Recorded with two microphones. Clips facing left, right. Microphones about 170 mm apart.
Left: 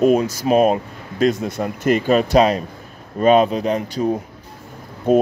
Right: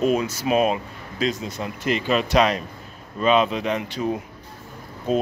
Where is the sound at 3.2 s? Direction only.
45° left (ahead or behind).